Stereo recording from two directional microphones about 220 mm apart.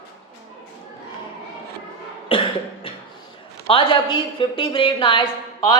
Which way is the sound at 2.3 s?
25° left (ahead or behind).